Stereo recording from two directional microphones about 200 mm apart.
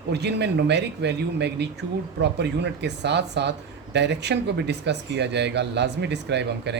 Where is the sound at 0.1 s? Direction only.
55° right (ahead or behind).